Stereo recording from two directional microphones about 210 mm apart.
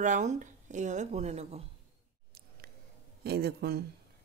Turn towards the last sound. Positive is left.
turn(degrees=-50)  # may be behind; listen again after turning